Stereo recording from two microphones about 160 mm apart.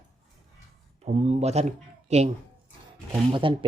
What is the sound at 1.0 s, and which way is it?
Speech, 45° right (ahead or behind).